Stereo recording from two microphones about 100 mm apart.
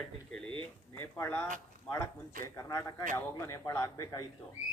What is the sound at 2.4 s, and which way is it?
A man's voice, 30° left (ahead or behind).